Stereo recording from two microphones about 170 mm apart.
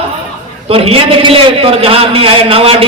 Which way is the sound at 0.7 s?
35° right (ahead or behind).